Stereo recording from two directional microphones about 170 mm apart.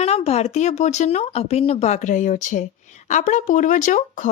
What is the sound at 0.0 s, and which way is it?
Speech, 40° left (ahead or behind).